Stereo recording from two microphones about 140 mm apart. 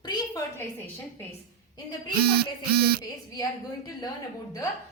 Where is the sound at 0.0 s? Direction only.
30° left (ahead or behind).